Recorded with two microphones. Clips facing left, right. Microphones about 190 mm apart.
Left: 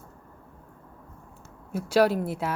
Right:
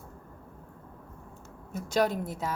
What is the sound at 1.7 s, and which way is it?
Speech, 10° left (ahead or behind).